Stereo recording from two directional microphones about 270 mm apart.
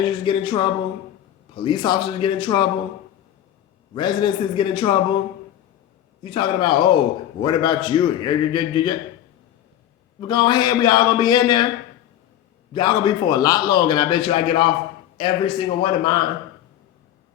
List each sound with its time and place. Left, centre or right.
0.0 s a man's voice: centre
3.9 s a man's voice: centre
6.2 s a man's voice: centre
10.2 s a man's voice: centre
12.7 s a man's voice: centre